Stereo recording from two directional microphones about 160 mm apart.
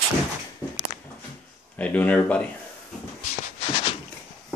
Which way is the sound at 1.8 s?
10° left (ahead or behind).